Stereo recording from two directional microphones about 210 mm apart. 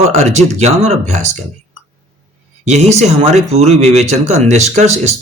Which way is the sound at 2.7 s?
30° right (ahead or behind).